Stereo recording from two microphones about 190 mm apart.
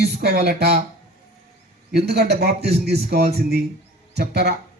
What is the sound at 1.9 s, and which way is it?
Music, 55° right (ahead or behind).